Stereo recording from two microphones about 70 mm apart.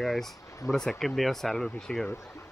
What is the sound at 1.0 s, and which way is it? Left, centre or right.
Speech, centre.